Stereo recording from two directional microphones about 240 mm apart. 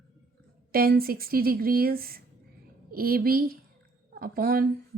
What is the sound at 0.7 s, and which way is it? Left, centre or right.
A woman's voice, right.